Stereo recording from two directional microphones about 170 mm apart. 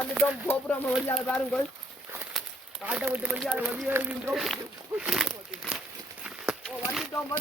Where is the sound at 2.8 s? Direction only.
10° right (ahead or behind).